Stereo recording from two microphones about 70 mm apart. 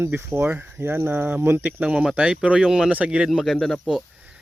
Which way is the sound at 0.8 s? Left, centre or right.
Right.